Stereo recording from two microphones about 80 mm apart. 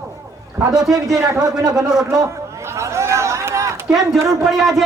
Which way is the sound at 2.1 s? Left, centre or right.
Right.